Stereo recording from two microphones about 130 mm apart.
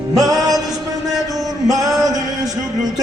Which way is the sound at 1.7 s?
25° right (ahead or behind).